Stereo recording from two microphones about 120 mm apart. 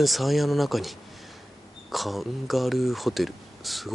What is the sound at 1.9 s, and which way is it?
Speech, centre (ahead or behind).